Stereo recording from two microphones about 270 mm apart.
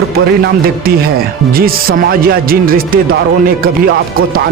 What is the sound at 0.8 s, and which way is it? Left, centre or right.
Speech, right.